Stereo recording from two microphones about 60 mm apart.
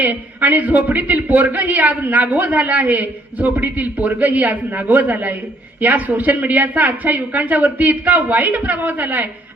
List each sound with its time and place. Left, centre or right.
0.0 s speech: right